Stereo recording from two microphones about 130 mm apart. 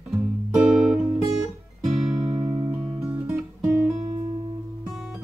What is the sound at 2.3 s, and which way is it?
Music, 30° right (ahead or behind).